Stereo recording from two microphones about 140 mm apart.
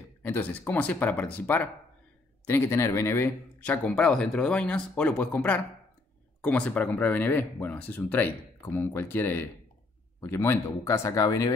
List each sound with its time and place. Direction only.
0.2 s speech: 15° left (ahead or behind)